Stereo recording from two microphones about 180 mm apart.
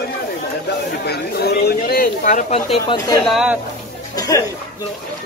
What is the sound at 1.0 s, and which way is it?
Speech, 60° left (ahead or behind).